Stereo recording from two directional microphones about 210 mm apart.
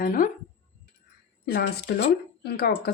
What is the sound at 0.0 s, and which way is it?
Speech, 40° left (ahead or behind).